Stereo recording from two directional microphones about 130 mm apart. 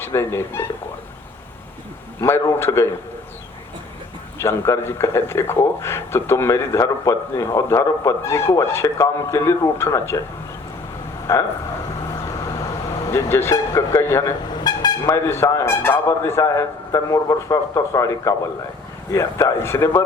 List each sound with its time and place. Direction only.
0.0 s speech: 20° left (ahead or behind)
2.2 s speech: 20° left (ahead or behind)
4.4 s speech: 20° left (ahead or behind)
11.3 s speech: 25° left (ahead or behind)
12.3 s vehicle: 25° left (ahead or behind)
14.5 s speech: 35° left (ahead or behind)